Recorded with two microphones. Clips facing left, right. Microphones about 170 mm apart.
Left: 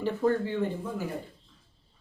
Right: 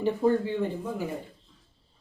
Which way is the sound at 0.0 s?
15° right (ahead or behind).